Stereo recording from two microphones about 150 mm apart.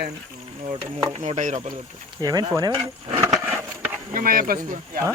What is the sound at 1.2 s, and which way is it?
Speech, 50° right (ahead or behind).